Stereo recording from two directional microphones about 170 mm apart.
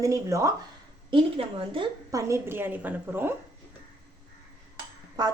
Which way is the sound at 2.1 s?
15° right (ahead or behind).